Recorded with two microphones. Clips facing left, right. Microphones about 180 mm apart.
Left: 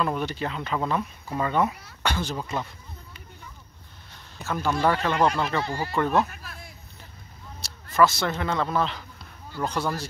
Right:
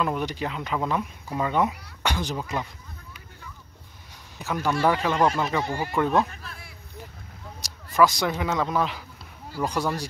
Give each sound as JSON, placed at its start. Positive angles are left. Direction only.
{"t": 0.0, "sound": "speech", "side_deg": -15}
{"t": 4.5, "sound": "speech", "side_deg": -10}
{"t": 5.9, "sound": "speech", "side_deg": 0}
{"t": 8.0, "sound": "speech", "side_deg": -15}